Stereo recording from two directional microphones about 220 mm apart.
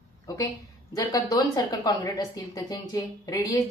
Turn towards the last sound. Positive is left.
turn(degrees=15)  # may be behind; listen again after turning